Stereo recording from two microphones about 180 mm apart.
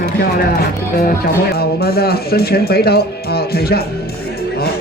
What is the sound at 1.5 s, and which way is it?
Speech, 60° left (ahead or behind).